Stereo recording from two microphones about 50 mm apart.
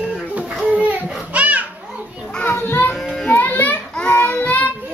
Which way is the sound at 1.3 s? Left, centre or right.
Right.